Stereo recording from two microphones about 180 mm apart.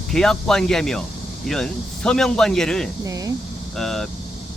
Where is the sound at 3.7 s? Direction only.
Centre (ahead or behind).